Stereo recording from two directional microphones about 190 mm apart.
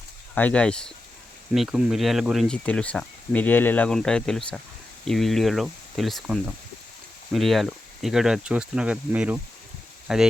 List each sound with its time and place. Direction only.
0.3 s speech: 5° left (ahead or behind)